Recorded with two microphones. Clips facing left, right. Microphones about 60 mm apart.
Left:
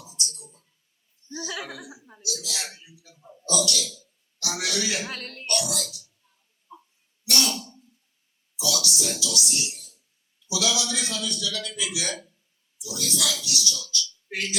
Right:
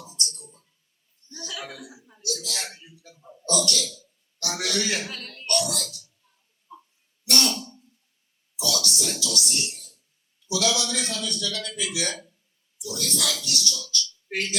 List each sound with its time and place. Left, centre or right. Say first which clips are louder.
0.0 s a sound: right 1 dB; right
1.5 s cough: even; left
2.2 s a man's voice: right 2 dB; right
3.2 s speech: left 1 dB; centre
3.4 s a man's voice: right 1 dB; right
5.0 s speech: left 2 dB; left
5.5 s a man's voice: right 2 dB; right
6.7 s a sound: right 1 dB; centre
7.3 s a man's voice: right 2 dB; right